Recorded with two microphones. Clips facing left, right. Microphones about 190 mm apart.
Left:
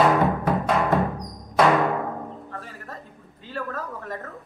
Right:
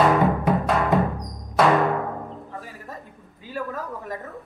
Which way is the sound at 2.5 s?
15° right (ahead or behind).